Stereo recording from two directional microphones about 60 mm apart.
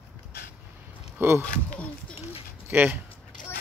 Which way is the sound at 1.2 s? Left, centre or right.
Right.